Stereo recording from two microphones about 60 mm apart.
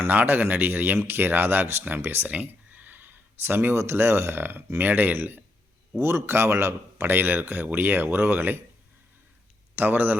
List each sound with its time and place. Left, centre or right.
0.1 s speech: right
2.2 s speech: right
6.0 s speech: right
9.7 s speech: right